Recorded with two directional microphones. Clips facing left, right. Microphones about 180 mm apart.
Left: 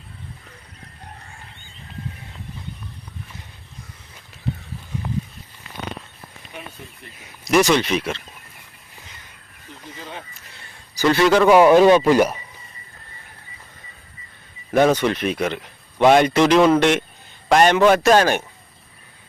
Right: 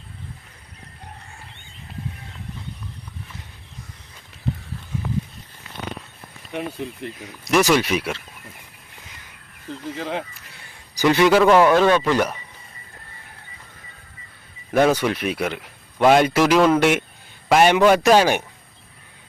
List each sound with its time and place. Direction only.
6.5 s speech: 70° right (ahead or behind)
7.4 s speech: 5° right (ahead or behind)
10.0 s speech: 90° right
10.9 s speech: 15° right (ahead or behind)
11.4 s speech: 15° left (ahead or behind)
14.7 s speech: 5° right (ahead or behind)